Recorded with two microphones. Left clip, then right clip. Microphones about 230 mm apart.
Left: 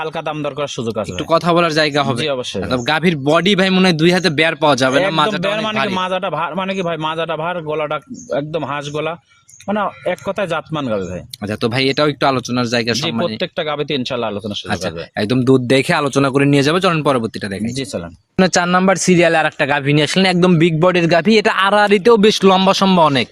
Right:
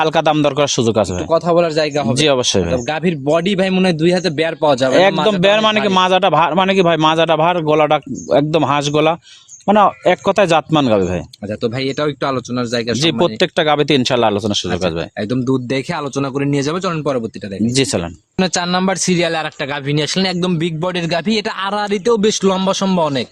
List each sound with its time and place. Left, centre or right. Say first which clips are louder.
0.0 s a man's voice: right 8 dB; right
1.3 s speech: left 2 dB; left
2.1 s a man's voice: right 6 dB; right
2.7 s speech: left 2 dB; left
5.4 s a man's voice: right 5 dB; right
11.6 s speech: left 3 dB; centre
13.0 s a man's voice: right 5 dB; right
15.2 s speech: left 6 dB; centre
18.3 s speech: left 3 dB; centre; by 23.2 s left